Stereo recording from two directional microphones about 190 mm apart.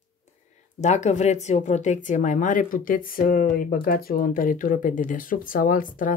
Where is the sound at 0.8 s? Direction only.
40° left (ahead or behind).